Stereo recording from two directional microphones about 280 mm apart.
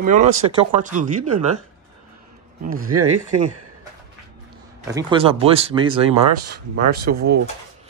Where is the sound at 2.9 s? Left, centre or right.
Right.